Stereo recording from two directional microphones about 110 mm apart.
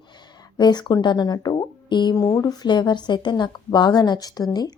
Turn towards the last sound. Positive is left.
turn(degrees=40)  # may be behind; listen again after turning